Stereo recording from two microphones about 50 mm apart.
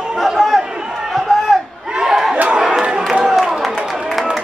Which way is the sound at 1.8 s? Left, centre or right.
Centre.